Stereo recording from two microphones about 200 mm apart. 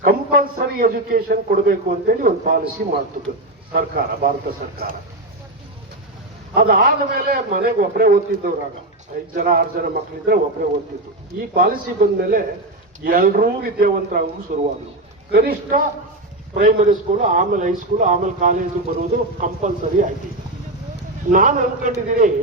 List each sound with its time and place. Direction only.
0.0 s a man's voice: 45° right (ahead or behind)
6.5 s a man's voice: 50° right (ahead or behind)
21.3 s a man's voice: 40° right (ahead or behind)